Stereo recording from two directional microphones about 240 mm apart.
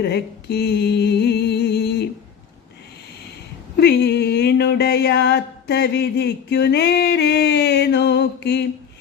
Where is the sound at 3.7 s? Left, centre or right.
Left.